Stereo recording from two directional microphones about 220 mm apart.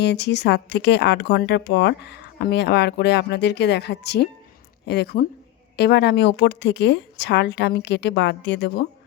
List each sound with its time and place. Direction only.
0.0 s speech: 50° left (ahead or behind)